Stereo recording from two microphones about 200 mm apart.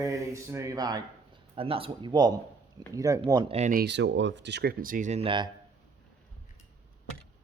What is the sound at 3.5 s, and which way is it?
Speech, 35° right (ahead or behind).